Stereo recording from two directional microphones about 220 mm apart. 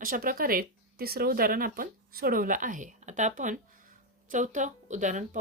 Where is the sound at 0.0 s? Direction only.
40° right (ahead or behind).